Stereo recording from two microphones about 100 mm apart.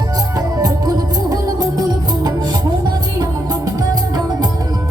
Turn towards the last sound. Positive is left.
turn(degrees=-40)  # may be behind; listen again after turning